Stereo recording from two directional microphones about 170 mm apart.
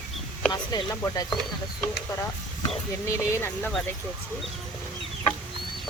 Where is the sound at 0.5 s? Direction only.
25° left (ahead or behind).